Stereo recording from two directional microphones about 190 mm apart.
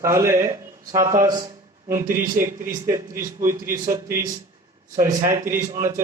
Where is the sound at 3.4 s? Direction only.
15° right (ahead or behind).